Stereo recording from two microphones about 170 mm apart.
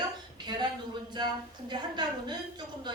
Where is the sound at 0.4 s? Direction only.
25° right (ahead or behind).